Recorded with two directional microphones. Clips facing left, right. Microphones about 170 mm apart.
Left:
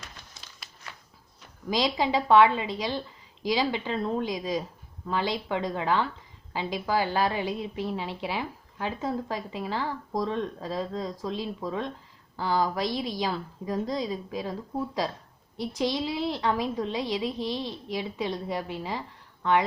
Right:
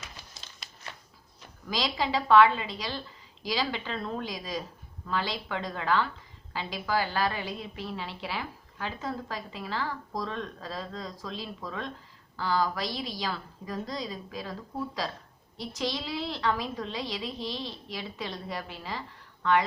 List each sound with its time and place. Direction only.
1.7 s a woman's voice: 20° left (ahead or behind)
15.5 s a woman's voice: 20° left (ahead or behind)